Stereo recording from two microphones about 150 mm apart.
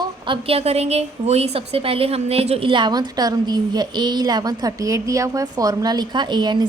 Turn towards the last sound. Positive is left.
turn(degrees=-30)  # may be behind; listen again after turning